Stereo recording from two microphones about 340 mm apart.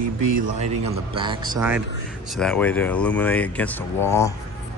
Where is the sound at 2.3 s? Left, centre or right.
Centre.